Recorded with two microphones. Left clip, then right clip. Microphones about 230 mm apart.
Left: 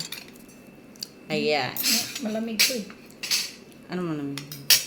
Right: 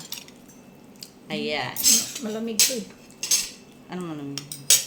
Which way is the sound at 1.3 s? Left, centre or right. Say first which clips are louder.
Left 3 dB; left.